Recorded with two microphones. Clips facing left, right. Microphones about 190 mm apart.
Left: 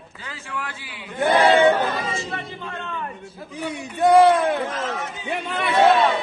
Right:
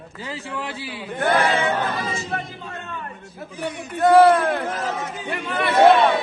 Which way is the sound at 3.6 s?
Centre (ahead or behind).